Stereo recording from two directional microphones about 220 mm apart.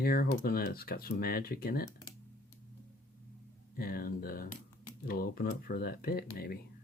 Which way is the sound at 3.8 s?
40° left (ahead or behind).